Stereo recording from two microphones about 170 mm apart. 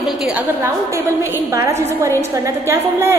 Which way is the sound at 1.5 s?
15° right (ahead or behind).